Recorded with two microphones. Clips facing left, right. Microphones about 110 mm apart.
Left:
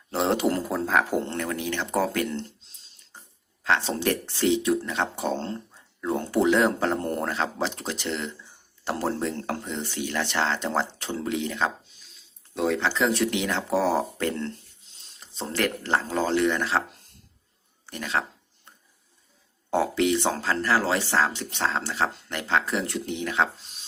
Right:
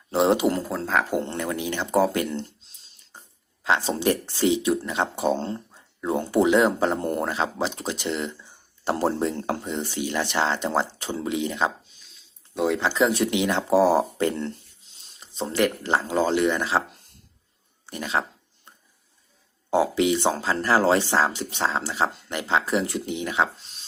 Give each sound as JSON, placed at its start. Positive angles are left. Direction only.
{"t": 0.1, "sound": "a sound", "side_deg": -15}
{"t": 0.4, "sound": "speech", "side_deg": 0}
{"t": 3.6, "sound": "speech", "side_deg": -15}
{"t": 8.8, "sound": "speech", "side_deg": -25}
{"t": 17.8, "sound": "speech", "side_deg": -15}
{"t": 19.7, "sound": "speech", "side_deg": -10}
{"t": 20.7, "sound": "speech", "side_deg": -30}
{"t": 21.1, "sound": "speech", "side_deg": -15}